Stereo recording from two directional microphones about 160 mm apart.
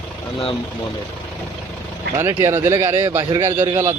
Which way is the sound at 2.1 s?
15° right (ahead or behind).